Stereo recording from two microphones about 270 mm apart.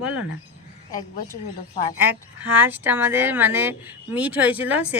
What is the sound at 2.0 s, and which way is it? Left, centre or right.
Speech, centre.